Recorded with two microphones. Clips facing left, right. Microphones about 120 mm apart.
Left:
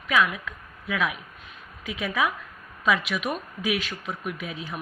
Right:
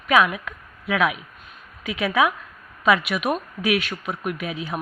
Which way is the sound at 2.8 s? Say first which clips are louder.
Right 5 dB; 65° right (ahead or behind).